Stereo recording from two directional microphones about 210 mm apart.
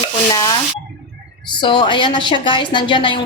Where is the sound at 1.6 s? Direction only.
25° left (ahead or behind).